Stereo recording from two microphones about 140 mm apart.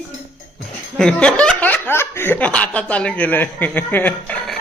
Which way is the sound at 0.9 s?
5° left (ahead or behind).